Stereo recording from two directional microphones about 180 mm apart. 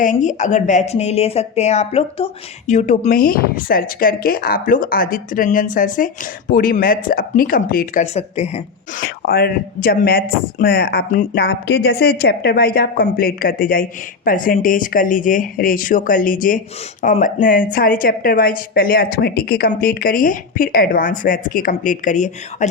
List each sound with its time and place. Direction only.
0.0 s speech: 45° left (ahead or behind)
8.0 s speech: 40° left (ahead or behind)
9.0 s speech: 60° left (ahead or behind); by 22.7 s 45° left (ahead or behind)